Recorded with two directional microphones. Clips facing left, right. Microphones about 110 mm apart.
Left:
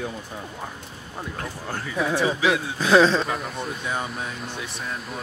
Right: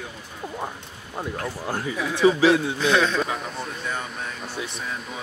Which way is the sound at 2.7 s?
35° left (ahead or behind).